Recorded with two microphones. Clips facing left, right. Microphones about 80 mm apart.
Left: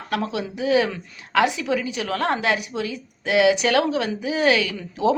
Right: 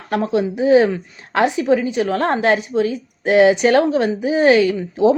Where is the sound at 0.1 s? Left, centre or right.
Right.